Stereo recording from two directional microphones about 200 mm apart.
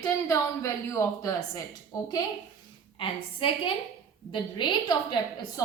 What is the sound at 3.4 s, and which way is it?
A woman's voice, 25° left (ahead or behind).